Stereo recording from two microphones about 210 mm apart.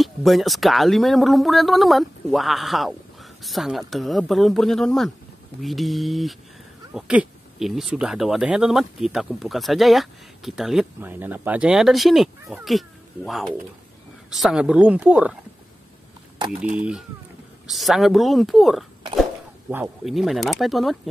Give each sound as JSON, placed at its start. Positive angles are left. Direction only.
{"t": 0.0, "sound": "speech", "side_deg": 0}
{"t": 17.6, "sound": "speech", "side_deg": 0}